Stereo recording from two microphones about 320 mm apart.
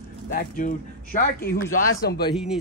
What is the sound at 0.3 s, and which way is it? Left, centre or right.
Speech, left.